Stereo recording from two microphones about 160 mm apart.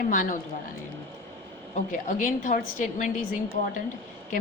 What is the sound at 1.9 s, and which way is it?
A woman's voice, 55° left (ahead or behind).